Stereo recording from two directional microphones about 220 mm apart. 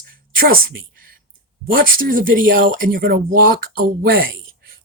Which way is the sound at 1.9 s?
40° right (ahead or behind).